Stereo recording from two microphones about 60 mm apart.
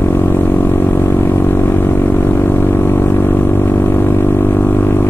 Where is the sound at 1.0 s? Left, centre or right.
Left.